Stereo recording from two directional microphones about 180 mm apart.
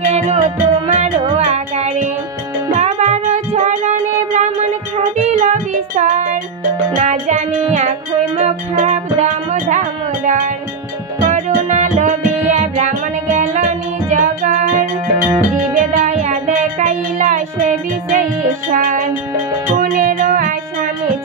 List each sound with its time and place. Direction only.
0.0 s music: 40° right (ahead or behind)
15.9 s music: 40° right (ahead or behind)